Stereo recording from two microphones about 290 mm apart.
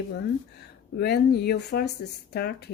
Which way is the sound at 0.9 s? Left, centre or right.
Left.